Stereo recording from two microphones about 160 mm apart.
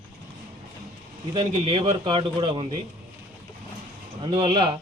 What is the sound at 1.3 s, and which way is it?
Speech, 35° right (ahead or behind).